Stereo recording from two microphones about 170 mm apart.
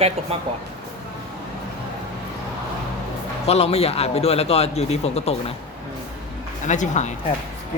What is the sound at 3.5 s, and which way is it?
Speech, 35° left (ahead or behind).